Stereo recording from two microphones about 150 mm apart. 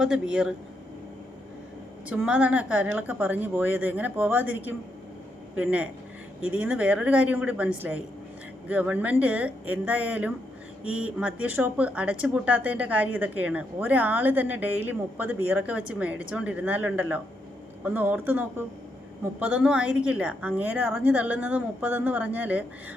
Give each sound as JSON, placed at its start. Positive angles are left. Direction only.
{"t": 0.0, "sound": "speech", "side_deg": -5}
{"t": 2.0, "sound": "speech", "side_deg": -10}